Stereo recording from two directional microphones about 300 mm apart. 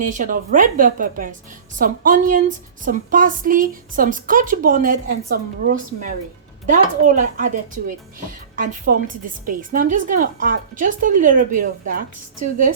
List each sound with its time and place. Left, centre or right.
0.1 s speech: right